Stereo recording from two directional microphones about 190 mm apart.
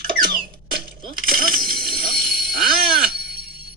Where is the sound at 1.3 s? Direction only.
50° right (ahead or behind).